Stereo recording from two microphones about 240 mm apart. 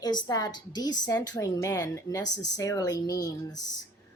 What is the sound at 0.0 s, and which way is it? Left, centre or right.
A woman's voice, centre.